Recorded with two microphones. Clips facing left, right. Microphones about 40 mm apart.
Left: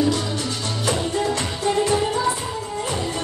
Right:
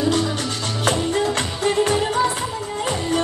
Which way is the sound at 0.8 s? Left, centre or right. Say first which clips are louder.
Right 2 dB; right.